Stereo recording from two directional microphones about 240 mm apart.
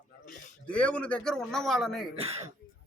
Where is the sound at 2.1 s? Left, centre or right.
Right.